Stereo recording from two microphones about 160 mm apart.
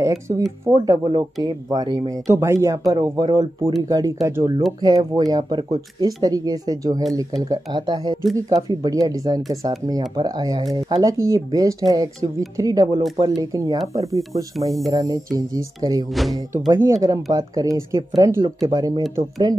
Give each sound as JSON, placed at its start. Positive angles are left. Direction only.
{"t": 0.0, "sound": "speech", "side_deg": -20}